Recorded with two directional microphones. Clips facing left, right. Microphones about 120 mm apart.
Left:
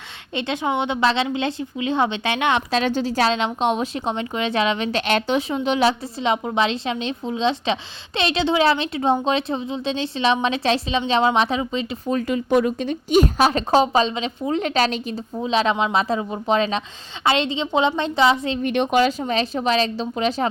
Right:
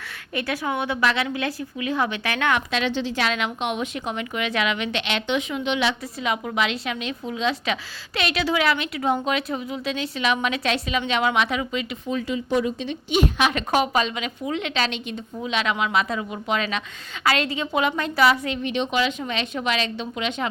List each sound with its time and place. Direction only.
0.3 s a woman's voice: 20° left (ahead or behind)
2.7 s a woman's voice: 40° left (ahead or behind)
12.1 s a woman's voice: 55° left (ahead or behind); by 18.6 s 25° left (ahead or behind)
18.6 s speech: 50° left (ahead or behind)
19.2 s a woman's voice: 35° left (ahead or behind)